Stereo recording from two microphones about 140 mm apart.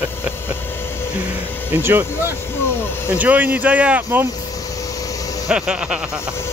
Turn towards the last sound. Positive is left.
turn(degrees=-5)  # may be behind; listen again after turning